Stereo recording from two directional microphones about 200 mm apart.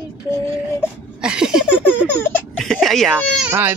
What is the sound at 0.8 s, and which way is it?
Speech, 5° right (ahead or behind).